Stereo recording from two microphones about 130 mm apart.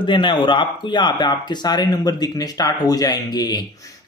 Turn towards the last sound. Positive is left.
turn(degrees=30)  # may be behind; listen again after turning